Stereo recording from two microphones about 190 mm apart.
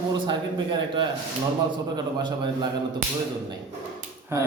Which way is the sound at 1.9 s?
20° right (ahead or behind).